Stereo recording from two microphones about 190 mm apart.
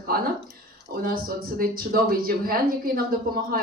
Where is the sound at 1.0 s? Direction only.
50° right (ahead or behind).